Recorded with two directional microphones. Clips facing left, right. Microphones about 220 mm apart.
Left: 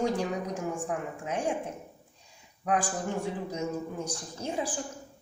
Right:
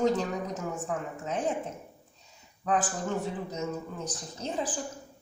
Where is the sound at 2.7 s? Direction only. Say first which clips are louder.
Even; 15° left (ahead or behind).